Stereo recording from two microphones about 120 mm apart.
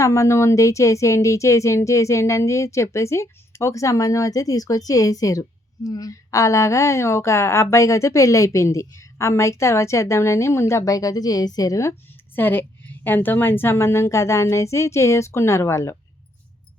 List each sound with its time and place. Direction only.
0.0 s speech: 25° left (ahead or behind)
12.4 s speech: 15° left (ahead or behind)